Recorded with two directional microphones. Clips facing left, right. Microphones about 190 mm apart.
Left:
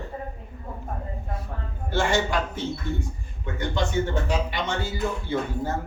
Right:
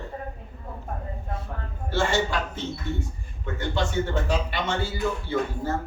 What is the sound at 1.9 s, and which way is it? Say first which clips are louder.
A man's voice: left 1 dB; 15° left (ahead or behind).